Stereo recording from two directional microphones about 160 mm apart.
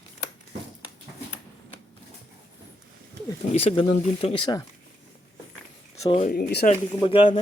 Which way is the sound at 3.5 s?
40° left (ahead or behind).